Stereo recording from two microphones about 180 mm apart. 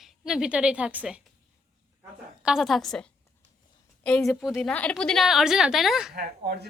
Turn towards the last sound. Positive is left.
turn(degrees=-60)  # may be behind; listen again after turning